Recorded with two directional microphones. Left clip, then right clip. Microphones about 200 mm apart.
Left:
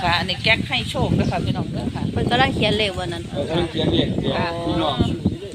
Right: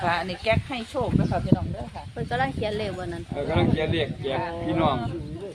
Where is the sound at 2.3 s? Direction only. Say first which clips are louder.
Left 8 dB; 20° left (ahead or behind).